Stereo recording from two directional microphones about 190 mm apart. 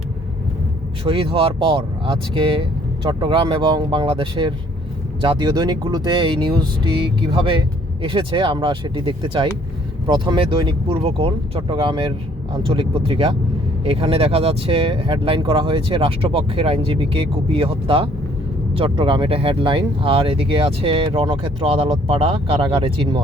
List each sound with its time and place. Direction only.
1.0 s speech: 30° right (ahead or behind)